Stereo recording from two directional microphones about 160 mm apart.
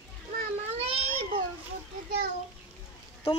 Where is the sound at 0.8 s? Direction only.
35° right (ahead or behind).